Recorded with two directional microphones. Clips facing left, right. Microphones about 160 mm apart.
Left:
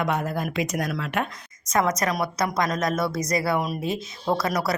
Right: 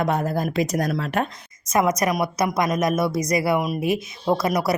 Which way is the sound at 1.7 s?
20° right (ahead or behind).